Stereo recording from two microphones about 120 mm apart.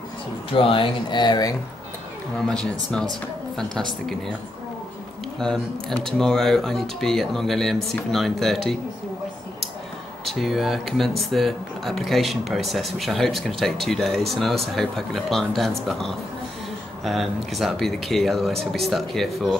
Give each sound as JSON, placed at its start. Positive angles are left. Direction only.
{"t": 0.6, "sound": "speech", "side_deg": 45}
{"t": 2.3, "sound": "speech", "side_deg": 5}
{"t": 5.4, "sound": "speech", "side_deg": 5}
{"t": 10.2, "sound": "speech", "side_deg": 0}